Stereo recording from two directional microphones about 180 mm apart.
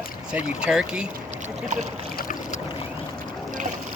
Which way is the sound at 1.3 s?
40° right (ahead or behind).